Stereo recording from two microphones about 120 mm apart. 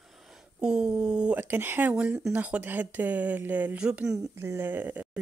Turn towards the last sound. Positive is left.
turn(degrees=-15)  # may be behind; listen again after turning